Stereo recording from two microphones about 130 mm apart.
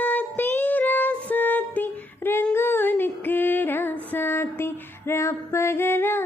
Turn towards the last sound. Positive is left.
turn(degrees=15)  # may be behind; listen again after turning